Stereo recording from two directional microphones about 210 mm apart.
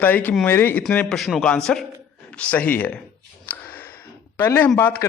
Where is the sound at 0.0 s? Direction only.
10° left (ahead or behind).